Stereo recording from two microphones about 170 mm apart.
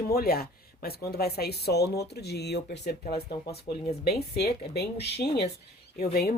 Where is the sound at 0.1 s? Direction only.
60° left (ahead or behind).